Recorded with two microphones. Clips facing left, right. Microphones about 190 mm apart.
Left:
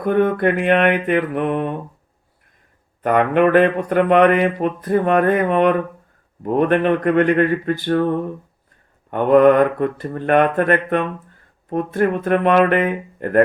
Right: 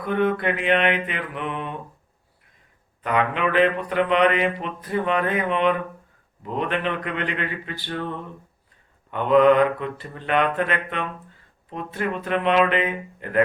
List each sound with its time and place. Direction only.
0.0 s mantra: 50° left (ahead or behind)
3.0 s mantra: 50° left (ahead or behind)